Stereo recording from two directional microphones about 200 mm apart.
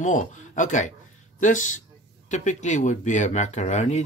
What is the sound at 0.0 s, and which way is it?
Speech, 40° left (ahead or behind).